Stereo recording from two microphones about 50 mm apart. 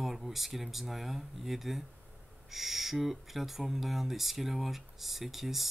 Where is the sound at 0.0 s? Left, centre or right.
Centre.